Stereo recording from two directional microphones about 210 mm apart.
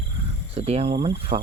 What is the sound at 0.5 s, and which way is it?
Speech, 30° right (ahead or behind).